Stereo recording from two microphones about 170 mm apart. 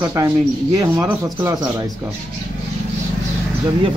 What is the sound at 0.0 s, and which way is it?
Speech, 15° right (ahead or behind).